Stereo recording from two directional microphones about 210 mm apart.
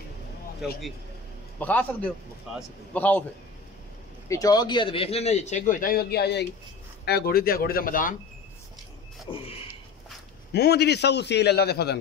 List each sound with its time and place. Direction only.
1.6 s a man's voice: 5° left (ahead or behind)
4.3 s a man's voice: 15° left (ahead or behind); by 8.2 s 40° left (ahead or behind)
9.3 s a sound: 25° left (ahead or behind)
10.5 s a man's voice: 50° left (ahead or behind)